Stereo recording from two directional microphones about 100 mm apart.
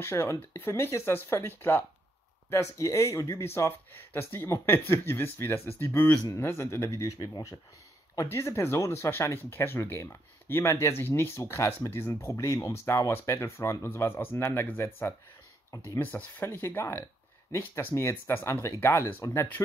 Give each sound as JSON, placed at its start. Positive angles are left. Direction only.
{"t": 0.0, "sound": "speech", "side_deg": 25}
{"t": 8.3, "sound": "speech", "side_deg": 25}
{"t": 15.7, "sound": "speech", "side_deg": 35}
{"t": 16.0, "sound": "speech", "side_deg": 20}